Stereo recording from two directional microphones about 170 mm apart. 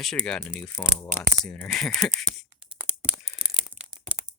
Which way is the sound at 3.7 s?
40° right (ahead or behind).